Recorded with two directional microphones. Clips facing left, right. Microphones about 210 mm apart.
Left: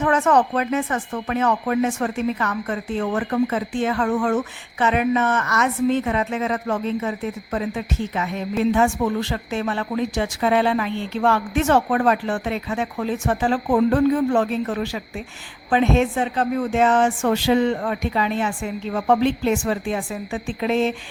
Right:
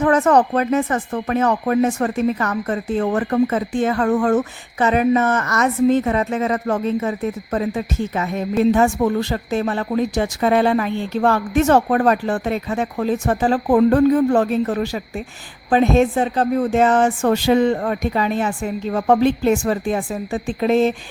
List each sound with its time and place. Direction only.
0.0 s speech: 35° right (ahead or behind)